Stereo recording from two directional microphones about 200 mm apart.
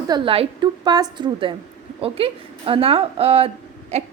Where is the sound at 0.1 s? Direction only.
25° right (ahead or behind).